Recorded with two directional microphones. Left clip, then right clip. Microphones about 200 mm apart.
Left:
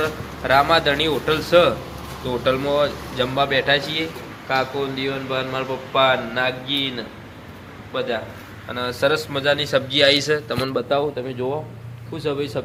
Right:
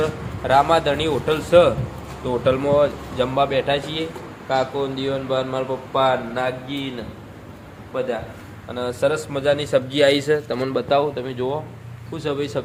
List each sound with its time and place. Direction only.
0.0 s a man's voice: centre (ahead or behind); by 12.6 s 20° right (ahead or behind)